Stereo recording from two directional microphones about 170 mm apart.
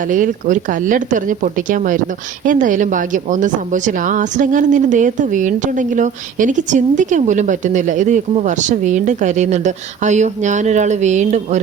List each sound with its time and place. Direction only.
0.1 s a woman's voice: 50° right (ahead or behind)